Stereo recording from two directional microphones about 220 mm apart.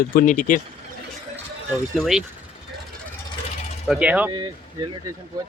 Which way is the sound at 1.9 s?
Centre (ahead or behind).